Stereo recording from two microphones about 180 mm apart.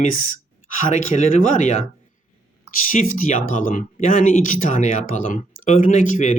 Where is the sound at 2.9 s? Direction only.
50° left (ahead or behind).